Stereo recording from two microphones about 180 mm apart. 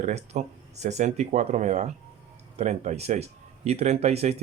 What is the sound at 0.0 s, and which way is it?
Speech, 40° right (ahead or behind).